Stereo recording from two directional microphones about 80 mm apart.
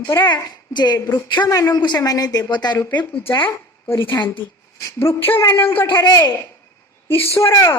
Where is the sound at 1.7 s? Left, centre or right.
Left.